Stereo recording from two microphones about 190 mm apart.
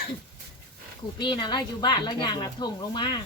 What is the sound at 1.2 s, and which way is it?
Speech, 25° left (ahead or behind).